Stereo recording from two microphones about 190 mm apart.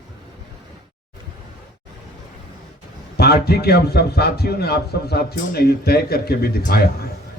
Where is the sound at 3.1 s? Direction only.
55° left (ahead or behind).